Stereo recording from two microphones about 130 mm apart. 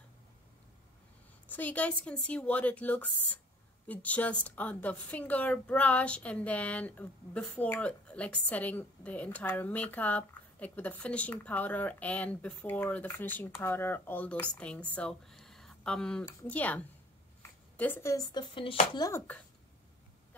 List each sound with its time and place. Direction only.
1.5 s a woman's voice: 10° left (ahead or behind)
17.4 s a sound: 15° left (ahead or behind)
18.5 s speech: 40° left (ahead or behind)
18.9 s speech: 25° left (ahead or behind)